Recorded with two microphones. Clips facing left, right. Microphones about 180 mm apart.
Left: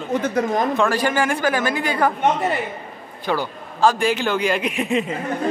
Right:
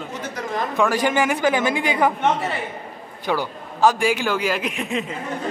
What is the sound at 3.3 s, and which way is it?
A woman's voice, 10° right (ahead or behind).